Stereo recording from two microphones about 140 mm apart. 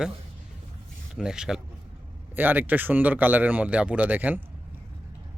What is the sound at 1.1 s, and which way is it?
A man's voice, 5° right (ahead or behind).